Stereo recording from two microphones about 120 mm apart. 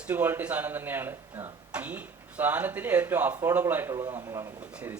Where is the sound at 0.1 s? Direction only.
15° right (ahead or behind).